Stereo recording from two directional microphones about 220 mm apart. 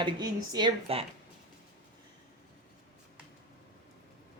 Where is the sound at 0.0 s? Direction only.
20° right (ahead or behind).